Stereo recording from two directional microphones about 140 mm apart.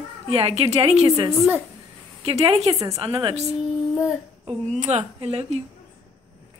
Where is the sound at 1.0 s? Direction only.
25° right (ahead or behind).